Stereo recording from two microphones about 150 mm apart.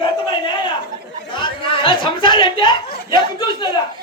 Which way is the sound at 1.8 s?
30° left (ahead or behind).